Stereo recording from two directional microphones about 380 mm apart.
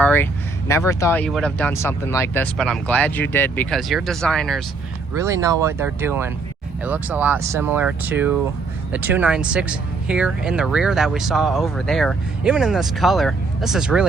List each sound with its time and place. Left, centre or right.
0.0 s speech: centre